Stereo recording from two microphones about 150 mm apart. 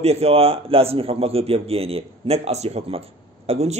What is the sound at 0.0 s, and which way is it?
A man's voice, 45° right (ahead or behind).